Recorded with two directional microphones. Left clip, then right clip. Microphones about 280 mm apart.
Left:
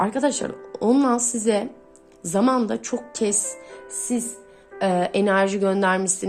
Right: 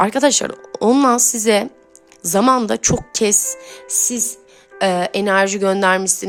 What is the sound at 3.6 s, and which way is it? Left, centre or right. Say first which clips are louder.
Music: right 12 dB; right.